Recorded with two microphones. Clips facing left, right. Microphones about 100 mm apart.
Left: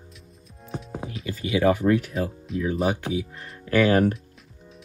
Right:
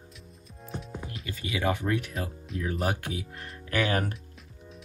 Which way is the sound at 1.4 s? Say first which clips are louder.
Left 8 dB; 35° left (ahead or behind).